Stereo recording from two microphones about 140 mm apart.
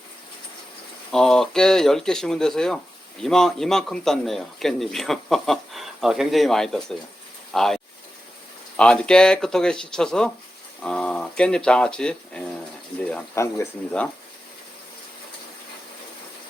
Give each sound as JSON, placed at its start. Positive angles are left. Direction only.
{"t": 1.1, "sound": "speech", "side_deg": 5}
{"t": 13.3, "sound": "speech", "side_deg": 20}